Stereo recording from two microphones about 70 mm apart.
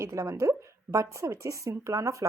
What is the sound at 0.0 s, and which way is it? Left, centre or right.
Speech, right.